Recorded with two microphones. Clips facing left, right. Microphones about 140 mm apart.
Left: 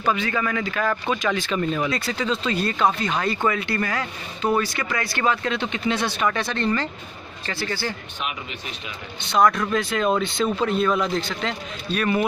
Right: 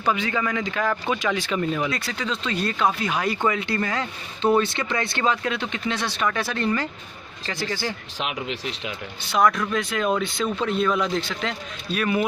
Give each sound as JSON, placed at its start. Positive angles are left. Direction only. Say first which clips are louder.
{"t": 0.0, "sound": "a man's voice", "louder": "left 1 dB", "side_deg": -15}
{"t": 1.8, "sound": "a man's voice", "louder": "left 2 dB", "side_deg": 0}
{"t": 5.6, "sound": "a man's voice", "louder": "left 3 dB", "side_deg": 5}
{"t": 8.2, "sound": "speech", "louder": "right 6 dB", "side_deg": -90}
{"t": 9.2, "sound": "a man's voice", "louder": "left 2 dB", "side_deg": -5}